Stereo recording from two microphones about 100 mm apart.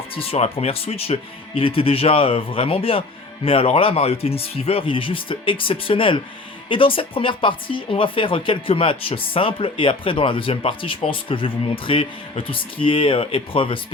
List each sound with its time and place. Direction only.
0.1 s speech: 70° left (ahead or behind)